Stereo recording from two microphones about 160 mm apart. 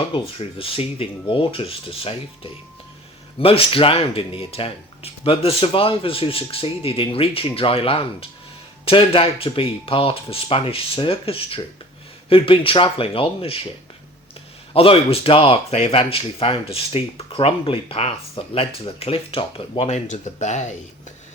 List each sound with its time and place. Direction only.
0.1 s speech: 35° left (ahead or behind)
14.7 s speech: 35° left (ahead or behind)